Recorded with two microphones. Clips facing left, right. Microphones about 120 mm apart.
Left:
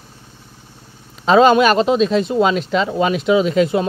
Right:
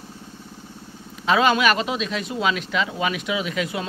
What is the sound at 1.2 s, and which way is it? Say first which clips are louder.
Speech: left 7 dB; 35° left (ahead or behind).